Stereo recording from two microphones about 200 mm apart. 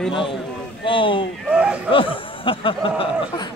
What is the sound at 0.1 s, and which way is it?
Speech, 25° left (ahead or behind).